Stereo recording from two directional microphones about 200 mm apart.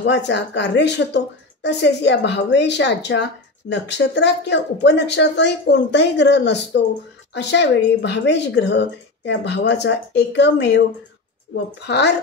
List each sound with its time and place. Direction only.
0.0 s speech: 60° left (ahead or behind)